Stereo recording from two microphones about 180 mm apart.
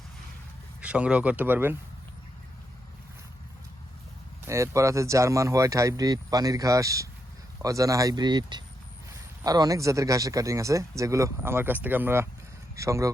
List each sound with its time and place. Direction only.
0.8 s speech: 5° right (ahead or behind)
4.4 s speech: 15° right (ahead or behind)